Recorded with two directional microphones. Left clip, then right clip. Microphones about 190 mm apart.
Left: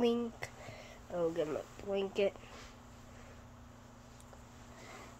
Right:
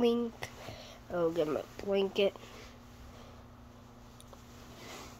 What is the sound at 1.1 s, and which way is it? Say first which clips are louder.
Speech: right 4 dB; 20° right (ahead or behind).